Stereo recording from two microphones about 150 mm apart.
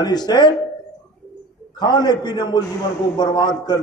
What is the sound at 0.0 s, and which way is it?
Speech, 25° left (ahead or behind).